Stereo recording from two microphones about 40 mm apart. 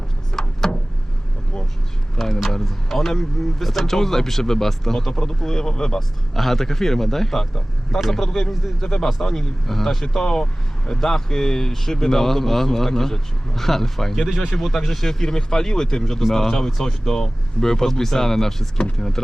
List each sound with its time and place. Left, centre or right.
0.4 s a sound: centre
2.1 s speech: centre
10.4 s speech: centre